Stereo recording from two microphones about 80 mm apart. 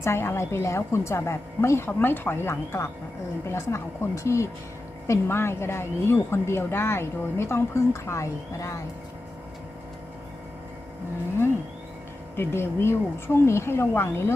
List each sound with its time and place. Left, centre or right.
0.0 s a woman's voice: left
12.4 s a woman's voice: left